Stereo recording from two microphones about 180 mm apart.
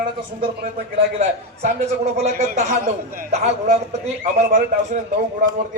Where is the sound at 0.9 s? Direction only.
40° right (ahead or behind).